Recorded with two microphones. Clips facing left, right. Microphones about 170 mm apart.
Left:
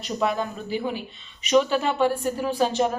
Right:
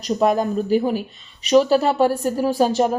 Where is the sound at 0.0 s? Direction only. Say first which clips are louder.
Right 7 dB; 45° right (ahead or behind).